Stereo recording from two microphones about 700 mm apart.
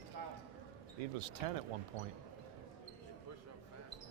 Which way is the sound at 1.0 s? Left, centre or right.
Right.